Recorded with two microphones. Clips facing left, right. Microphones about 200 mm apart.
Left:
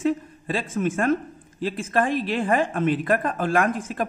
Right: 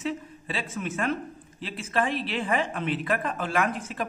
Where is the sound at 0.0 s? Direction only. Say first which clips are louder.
Left 8 dB; 45° left (ahead or behind).